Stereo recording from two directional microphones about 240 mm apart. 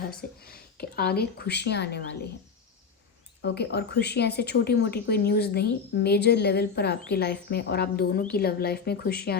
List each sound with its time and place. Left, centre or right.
0.1 s speech: left
3.4 s speech: left